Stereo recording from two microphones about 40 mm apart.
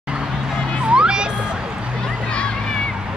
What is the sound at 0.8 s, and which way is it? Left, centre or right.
Music, right.